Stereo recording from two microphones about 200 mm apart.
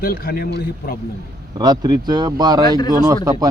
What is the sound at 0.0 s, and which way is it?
Speech, 50° left (ahead or behind).